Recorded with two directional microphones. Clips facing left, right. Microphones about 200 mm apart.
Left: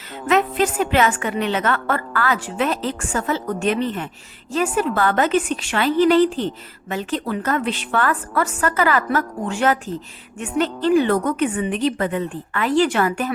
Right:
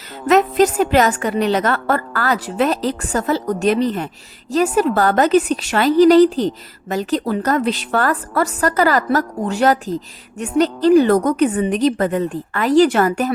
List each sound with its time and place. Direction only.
0.3 s a woman's voice: 40° right (ahead or behind)